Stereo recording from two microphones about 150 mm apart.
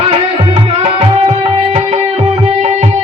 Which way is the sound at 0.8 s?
40° right (ahead or behind).